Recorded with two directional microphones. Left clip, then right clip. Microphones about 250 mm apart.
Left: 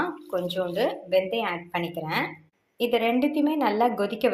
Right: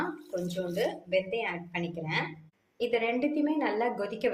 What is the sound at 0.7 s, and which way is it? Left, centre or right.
A woman's voice, centre.